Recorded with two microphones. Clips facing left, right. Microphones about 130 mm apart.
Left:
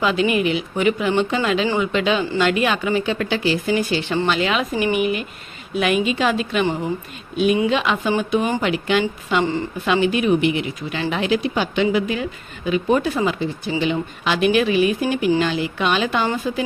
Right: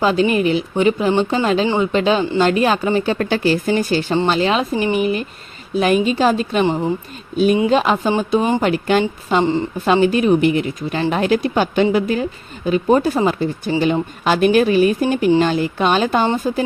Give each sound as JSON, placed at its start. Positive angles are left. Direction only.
{"t": 0.0, "sound": "speech", "side_deg": -35}